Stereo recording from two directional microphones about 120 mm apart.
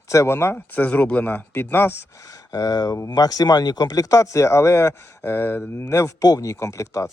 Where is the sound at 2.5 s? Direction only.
30° left (ahead or behind).